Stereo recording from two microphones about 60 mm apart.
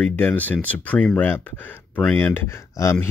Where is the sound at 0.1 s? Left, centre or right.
Left.